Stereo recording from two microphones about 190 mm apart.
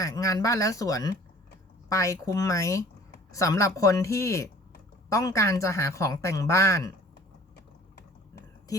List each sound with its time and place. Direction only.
0.0 s speech: 15° left (ahead or behind)